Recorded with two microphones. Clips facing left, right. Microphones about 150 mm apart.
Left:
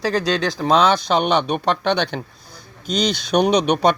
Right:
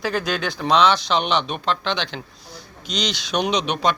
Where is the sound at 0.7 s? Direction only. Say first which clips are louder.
Left 1 dB; 45° left (ahead or behind).